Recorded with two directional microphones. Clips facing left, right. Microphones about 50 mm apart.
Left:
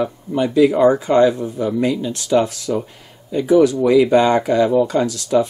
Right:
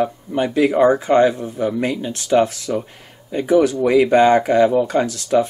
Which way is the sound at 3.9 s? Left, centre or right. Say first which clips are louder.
Right 3 dB; right.